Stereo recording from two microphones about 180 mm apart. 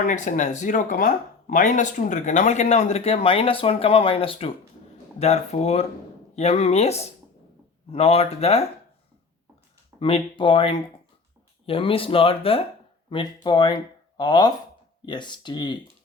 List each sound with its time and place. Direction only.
0.0 s speech: 45° left (ahead or behind)
10.0 s speech: 30° left (ahead or behind)